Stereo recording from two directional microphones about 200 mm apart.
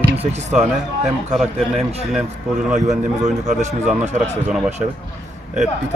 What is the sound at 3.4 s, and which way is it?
Speech, 35° right (ahead or behind).